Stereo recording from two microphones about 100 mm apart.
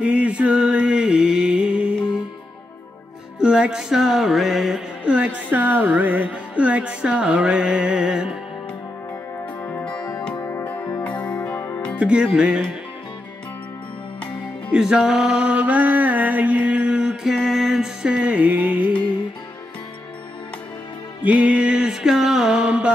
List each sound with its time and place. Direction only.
0.0 s music: 10° right (ahead or behind)
3.3 s music: 10° right (ahead or behind)
9.6 s music: 25° left (ahead or behind)
11.5 s music: 25° left (ahead or behind)
12.0 s music: 10° right (ahead or behind)
14.7 s mantra: 5° right (ahead or behind)
17.4 s music: centre (ahead or behind)
21.2 s music: 15° right (ahead or behind)